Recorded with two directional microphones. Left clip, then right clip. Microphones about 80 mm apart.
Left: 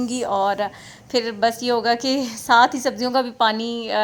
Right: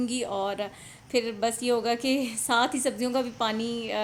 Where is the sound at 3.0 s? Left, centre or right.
Left.